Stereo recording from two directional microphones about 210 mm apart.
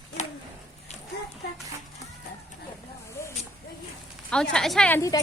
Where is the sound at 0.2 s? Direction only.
35° left (ahead or behind).